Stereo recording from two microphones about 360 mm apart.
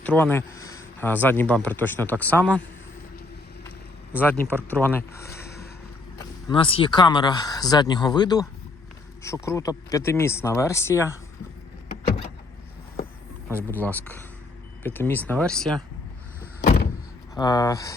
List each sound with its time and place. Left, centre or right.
0.0 s speech: centre
4.1 s speech: centre
13.5 s speech: centre
16.6 s vehicle: left
17.3 s speech: centre